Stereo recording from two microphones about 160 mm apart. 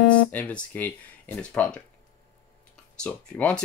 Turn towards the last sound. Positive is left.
turn(degrees=10)  # may be behind; listen again after turning